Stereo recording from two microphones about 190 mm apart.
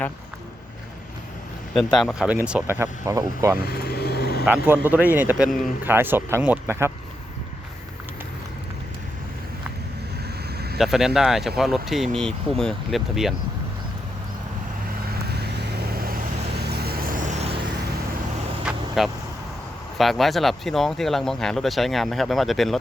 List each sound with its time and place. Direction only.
1.7 s speech: centre (ahead or behind); by 3.6 s 15° right (ahead or behind)
3.6 s vehicle: 55° left (ahead or behind)
4.4 s a man's voice: 5° right (ahead or behind)
10.8 s speech: centre (ahead or behind)
15.3 s vehicle: 60° right (ahead or behind); by 17.5 s 40° right (ahead or behind)
18.6 s vehicle: centre (ahead or behind)
20.0 s speech: centre (ahead or behind)